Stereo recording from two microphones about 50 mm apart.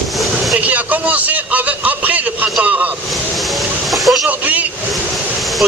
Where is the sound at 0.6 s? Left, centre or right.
Right.